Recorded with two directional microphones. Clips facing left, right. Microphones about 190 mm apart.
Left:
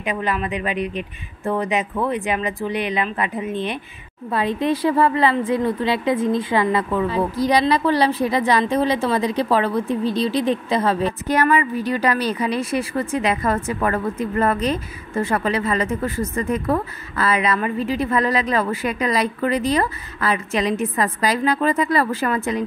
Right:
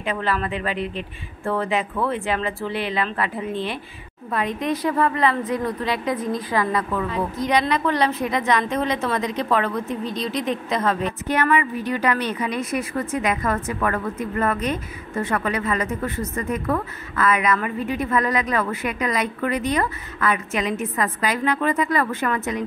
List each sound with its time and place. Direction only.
0.0 s a woman's voice: 15° left (ahead or behind)
4.3 s speech: 30° left (ahead or behind)